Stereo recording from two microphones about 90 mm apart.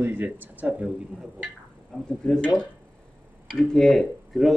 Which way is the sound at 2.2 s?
5° left (ahead or behind).